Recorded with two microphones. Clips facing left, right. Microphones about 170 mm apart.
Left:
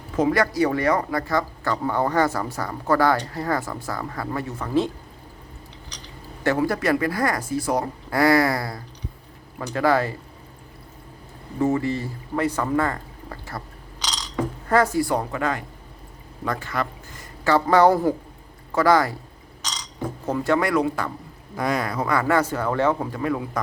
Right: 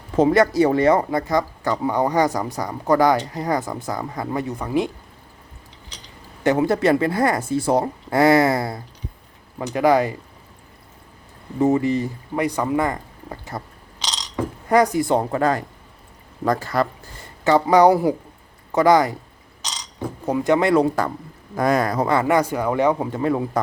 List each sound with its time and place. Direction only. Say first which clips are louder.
0.2 s speech: right 5 dB; 25° right (ahead or behind)
6.4 s speech: right 4 dB; 20° right (ahead or behind)
11.6 s speech: right 4 dB; 20° right (ahead or behind)
14.7 s speech: right 3 dB; 15° right (ahead or behind); by 17.2 s 35° right (ahead or behind)
17.4 s speech: right 3 dB; 15° right (ahead or behind)
20.2 s a man's voice: right 4 dB; 15° right (ahead or behind); by 22.0 s 45° right (ahead or behind)
22.0 s speech: left 1 dB; 25° right (ahead or behind)
23.1 s speech: right 4 dB; 30° right (ahead or behind)